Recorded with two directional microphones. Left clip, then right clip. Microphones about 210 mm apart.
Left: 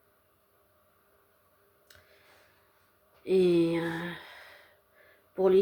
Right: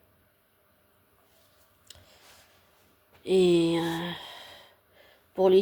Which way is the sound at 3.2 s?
40° right (ahead or behind).